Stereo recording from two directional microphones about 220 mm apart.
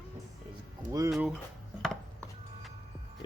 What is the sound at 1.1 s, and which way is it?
Speech, centre (ahead or behind).